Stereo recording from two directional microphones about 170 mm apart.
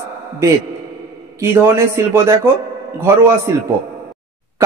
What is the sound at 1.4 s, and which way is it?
Speech, 15° right (ahead or behind).